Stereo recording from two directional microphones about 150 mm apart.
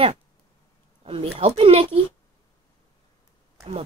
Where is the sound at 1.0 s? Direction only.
40° right (ahead or behind).